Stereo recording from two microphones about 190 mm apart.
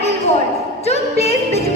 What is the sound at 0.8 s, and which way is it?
Music, 35° left (ahead or behind).